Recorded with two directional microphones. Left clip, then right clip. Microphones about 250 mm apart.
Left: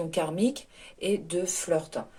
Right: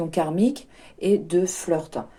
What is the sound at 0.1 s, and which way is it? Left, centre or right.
Speech, right.